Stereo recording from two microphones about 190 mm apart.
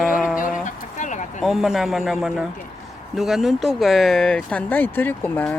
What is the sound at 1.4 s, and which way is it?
Speech, centre (ahead or behind).